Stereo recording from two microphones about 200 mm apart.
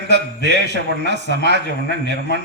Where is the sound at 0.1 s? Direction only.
60° right (ahead or behind).